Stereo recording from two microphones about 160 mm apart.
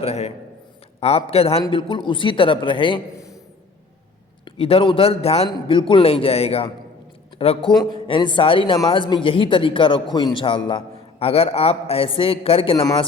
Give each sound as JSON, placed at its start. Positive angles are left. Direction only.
{"t": 0.0, "sound": "a man's voice", "side_deg": 40}
{"t": 4.4, "sound": "a man's voice", "side_deg": 35}
{"t": 12.8, "sound": "speech", "side_deg": 20}